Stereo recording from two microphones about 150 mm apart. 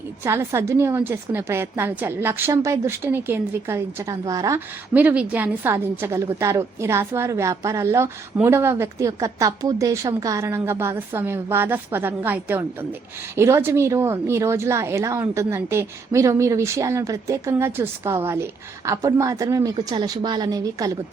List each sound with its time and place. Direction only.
0.3 s a woman's voice: 20° right (ahead or behind)
4.9 s a woman's voice: 10° right (ahead or behind)